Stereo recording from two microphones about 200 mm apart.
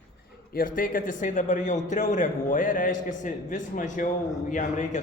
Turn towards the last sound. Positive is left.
turn(degrees=40)  # may be behind; listen again after turning